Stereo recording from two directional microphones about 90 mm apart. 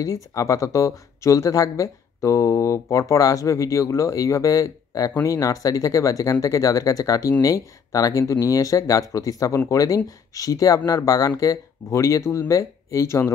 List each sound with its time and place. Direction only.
0.0 s speech: 40° left (ahead or behind)